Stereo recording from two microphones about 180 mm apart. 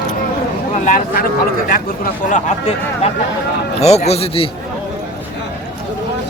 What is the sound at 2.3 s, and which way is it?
Speech, 35° left (ahead or behind).